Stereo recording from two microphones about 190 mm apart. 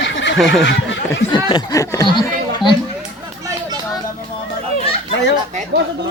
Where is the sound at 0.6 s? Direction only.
70° left (ahead or behind).